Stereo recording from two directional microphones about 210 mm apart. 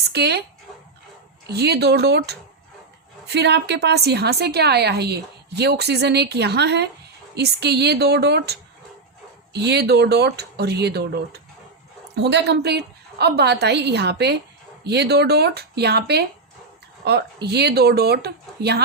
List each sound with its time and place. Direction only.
0.1 s speech: 50° right (ahead or behind)
1.5 s a woman's voice: 50° right (ahead or behind)